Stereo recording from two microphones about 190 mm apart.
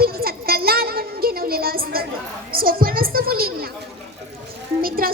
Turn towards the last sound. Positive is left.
turn(degrees=-50)  # may be behind; listen again after turning